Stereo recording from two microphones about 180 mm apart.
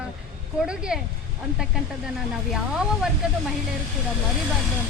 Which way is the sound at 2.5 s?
Centre (ahead or behind).